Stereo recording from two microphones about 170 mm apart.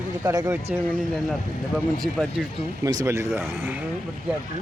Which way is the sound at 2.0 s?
5° left (ahead or behind).